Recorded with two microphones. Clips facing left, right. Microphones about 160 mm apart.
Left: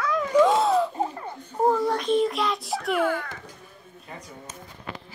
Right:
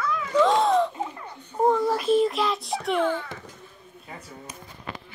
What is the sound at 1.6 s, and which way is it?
Child singing, centre (ahead or behind).